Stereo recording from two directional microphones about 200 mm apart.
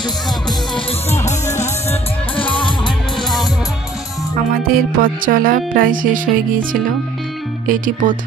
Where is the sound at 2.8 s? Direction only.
Centre (ahead or behind).